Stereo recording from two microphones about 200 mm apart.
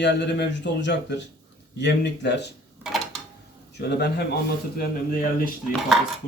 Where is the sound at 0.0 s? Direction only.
60° left (ahead or behind).